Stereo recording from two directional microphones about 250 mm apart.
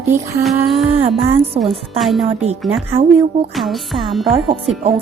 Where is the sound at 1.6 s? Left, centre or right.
Right.